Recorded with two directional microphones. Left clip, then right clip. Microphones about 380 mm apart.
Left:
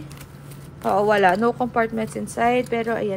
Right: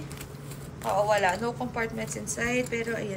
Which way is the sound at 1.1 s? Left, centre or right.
Centre.